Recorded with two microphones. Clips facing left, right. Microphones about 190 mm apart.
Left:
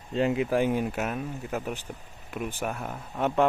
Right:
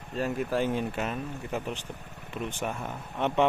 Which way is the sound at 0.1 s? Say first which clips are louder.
Left 5 dB; 20° left (ahead or behind).